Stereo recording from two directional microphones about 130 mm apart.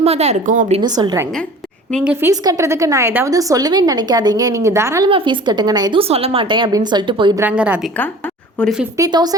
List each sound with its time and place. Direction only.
0.0 s a woman's voice: 55° right (ahead or behind); by 0.7 s 85° right
0.8 s a woman's voice: 35° right (ahead or behind)
2.2 s a woman's voice: 30° right (ahead or behind)
5.0 s a woman's voice: 40° right (ahead or behind)
6.0 s a woman's voice: 50° right (ahead or behind)
7.3 s a woman's voice: 10° right (ahead or behind)
8.6 s speech: 10° left (ahead or behind)
9.0 s a woman's voice: 30° right (ahead or behind)